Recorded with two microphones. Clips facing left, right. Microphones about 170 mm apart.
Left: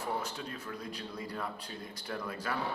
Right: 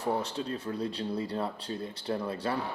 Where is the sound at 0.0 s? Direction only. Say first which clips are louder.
Right 6 dB; 30° right (ahead or behind).